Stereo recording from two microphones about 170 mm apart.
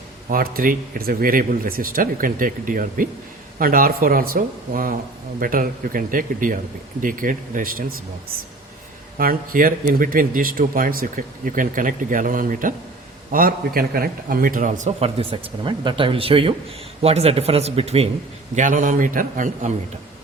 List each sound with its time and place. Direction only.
0.3 s speech: 55° right (ahead or behind)
9.1 s a man's voice: 55° right (ahead or behind); by 18.1 s 35° right (ahead or behind)
18.5 s speech: 50° right (ahead or behind)